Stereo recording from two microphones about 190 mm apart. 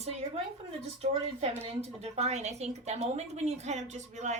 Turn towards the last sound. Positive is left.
turn(degrees=-35)  # may be behind; listen again after turning